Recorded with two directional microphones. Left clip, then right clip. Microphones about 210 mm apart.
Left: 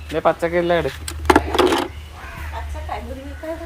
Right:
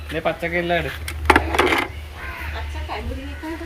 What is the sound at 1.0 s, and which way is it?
Sewing machine, 40° left (ahead or behind).